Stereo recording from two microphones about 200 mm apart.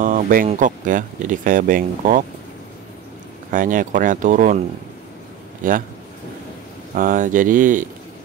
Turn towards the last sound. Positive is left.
turn(degrees=-40)  # may be behind; listen again after turning